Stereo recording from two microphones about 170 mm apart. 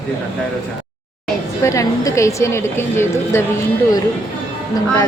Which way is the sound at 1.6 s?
20° left (ahead or behind).